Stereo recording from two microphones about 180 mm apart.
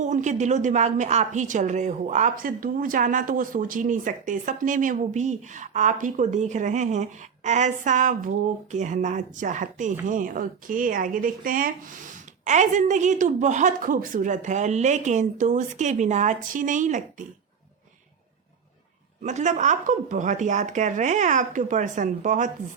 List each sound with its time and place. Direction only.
0.0 s a woman's voice: 40° right (ahead or behind)
19.2 s a woman's voice: 40° right (ahead or behind)